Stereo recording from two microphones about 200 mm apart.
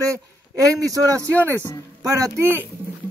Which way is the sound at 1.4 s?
15° right (ahead or behind).